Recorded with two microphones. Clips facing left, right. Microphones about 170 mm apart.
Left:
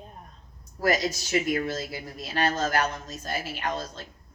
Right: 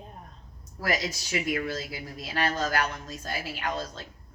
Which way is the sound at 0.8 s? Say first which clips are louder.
Left 5 dB; 40° left (ahead or behind).